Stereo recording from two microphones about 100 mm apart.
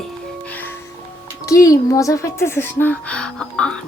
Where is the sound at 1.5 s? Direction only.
35° left (ahead or behind).